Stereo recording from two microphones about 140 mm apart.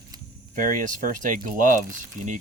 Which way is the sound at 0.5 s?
70° right (ahead or behind).